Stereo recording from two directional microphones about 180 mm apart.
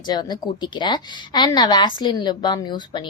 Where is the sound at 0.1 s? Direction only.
25° left (ahead or behind).